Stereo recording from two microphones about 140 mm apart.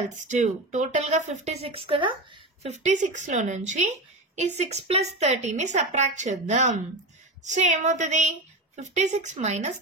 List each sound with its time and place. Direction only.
0.0 s a woman's voice: 60° right (ahead or behind); by 2.1 s 40° right (ahead or behind)
2.6 s a woman's voice: 55° right (ahead or behind)
4.6 s a woman's voice: 50° right (ahead or behind)